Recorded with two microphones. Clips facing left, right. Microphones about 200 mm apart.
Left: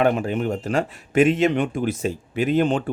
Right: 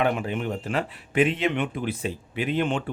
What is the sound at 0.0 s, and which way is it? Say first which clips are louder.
Speech: left 5 dB; 40° left (ahead or behind).